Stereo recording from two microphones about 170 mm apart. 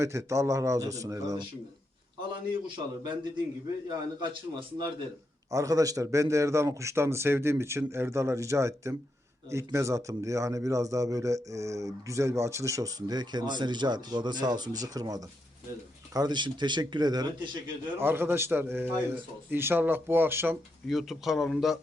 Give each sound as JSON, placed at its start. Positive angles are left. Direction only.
{"t": 0.0, "sound": "a man's voice", "side_deg": -15}
{"t": 5.5, "sound": "a man's voice", "side_deg": -20}
{"t": 18.0, "sound": "a man's voice", "side_deg": -15}
{"t": 20.8, "sound": "speech", "side_deg": 0}